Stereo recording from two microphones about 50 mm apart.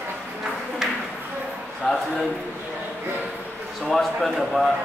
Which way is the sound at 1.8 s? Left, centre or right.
Centre.